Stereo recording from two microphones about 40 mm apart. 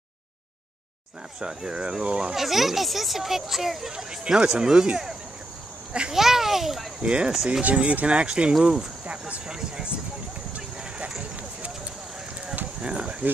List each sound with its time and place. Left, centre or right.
1.4 s speech: right
2.3 s speech: centre
3.9 s speech: centre
6.1 s a child's voice: centre
7.0 s speech: right
12.8 s speech: right